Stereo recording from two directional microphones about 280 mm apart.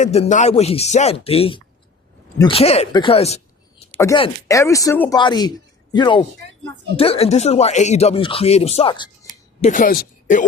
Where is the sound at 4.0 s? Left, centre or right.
Centre.